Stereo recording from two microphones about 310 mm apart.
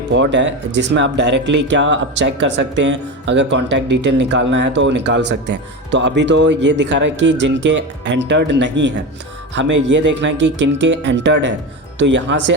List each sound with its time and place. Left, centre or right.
0.1 s speech: right
9.6 s speech: right
9.9 s speech: right